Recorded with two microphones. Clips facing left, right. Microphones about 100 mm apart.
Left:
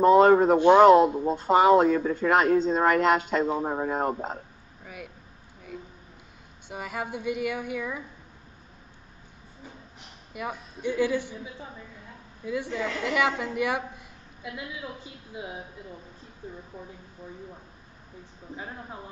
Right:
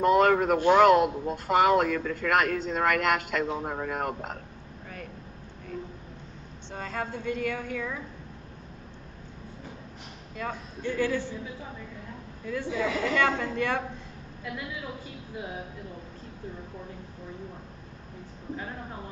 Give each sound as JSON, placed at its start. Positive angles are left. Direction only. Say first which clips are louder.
{"t": 0.0, "sound": "speech", "louder": "left 5 dB", "side_deg": 25}
{"t": 4.8, "sound": "a sound", "louder": "even", "side_deg": 10}
{"t": 6.7, "sound": "a woman's voice", "louder": "left 1 dB", "side_deg": 15}
{"t": 10.3, "sound": "a woman's voice", "louder": "even", "side_deg": 15}
{"t": 12.4, "sound": "a woman's voice", "louder": "even", "side_deg": 15}